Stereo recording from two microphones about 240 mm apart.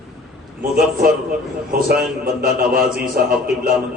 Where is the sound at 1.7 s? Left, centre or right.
Right.